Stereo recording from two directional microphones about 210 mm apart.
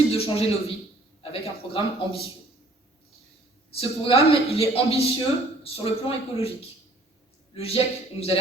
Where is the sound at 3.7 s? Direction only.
25° left (ahead or behind).